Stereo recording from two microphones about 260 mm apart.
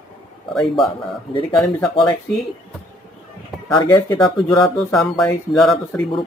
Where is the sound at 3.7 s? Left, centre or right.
Centre.